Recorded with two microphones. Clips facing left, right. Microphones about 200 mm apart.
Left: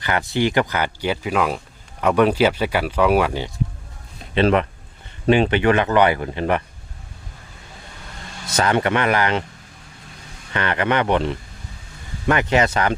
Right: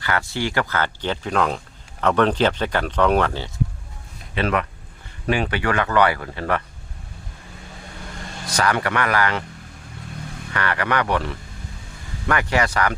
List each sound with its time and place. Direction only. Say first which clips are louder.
0.0 s speech: left 4 dB; 20° left (ahead or behind)
4.4 s speech: left 5 dB; 25° left (ahead or behind)
8.4 s speech: left 3 dB; 25° left (ahead or behind)
10.5 s speech: left 3 dB; 20° left (ahead or behind)